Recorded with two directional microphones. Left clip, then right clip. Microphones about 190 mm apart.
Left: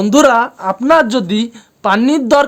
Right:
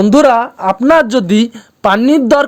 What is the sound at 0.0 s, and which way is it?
Speech, 20° right (ahead or behind).